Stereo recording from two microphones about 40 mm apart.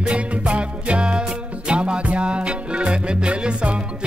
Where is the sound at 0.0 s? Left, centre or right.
Right.